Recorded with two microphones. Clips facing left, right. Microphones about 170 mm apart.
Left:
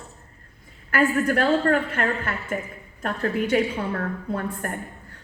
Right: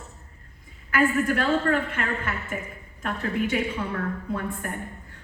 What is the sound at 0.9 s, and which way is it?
A woman's voice, 45° left (ahead or behind).